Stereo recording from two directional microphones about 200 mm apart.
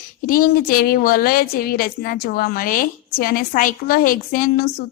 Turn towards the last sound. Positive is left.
turn(degrees=50)  # may be behind; listen again after turning